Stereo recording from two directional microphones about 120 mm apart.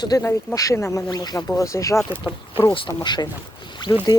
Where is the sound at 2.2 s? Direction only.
45° left (ahead or behind).